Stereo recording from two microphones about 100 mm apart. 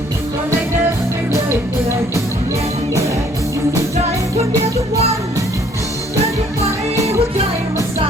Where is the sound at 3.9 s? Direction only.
90° right.